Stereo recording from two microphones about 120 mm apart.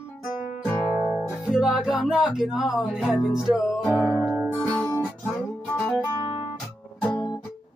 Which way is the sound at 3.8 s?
20° left (ahead or behind).